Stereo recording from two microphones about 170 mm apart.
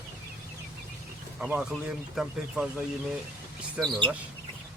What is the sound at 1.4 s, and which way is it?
Speech, 5° right (ahead or behind).